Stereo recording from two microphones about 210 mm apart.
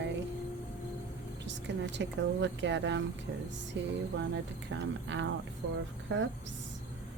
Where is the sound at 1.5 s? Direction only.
55° right (ahead or behind).